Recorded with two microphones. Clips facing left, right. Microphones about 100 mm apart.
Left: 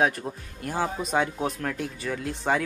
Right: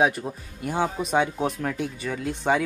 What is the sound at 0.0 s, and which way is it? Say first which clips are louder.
Speech: right 2 dB; 5° right (ahead or behind).